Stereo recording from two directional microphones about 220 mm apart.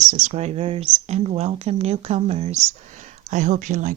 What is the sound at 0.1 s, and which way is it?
Speech, 35° right (ahead or behind).